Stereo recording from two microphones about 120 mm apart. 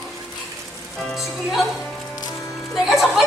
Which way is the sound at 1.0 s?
Centre (ahead or behind).